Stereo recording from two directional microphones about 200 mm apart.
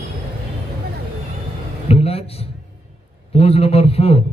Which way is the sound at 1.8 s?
30° left (ahead or behind).